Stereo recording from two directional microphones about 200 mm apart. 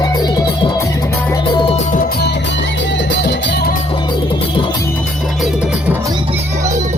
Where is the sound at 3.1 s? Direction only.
60° left (ahead or behind).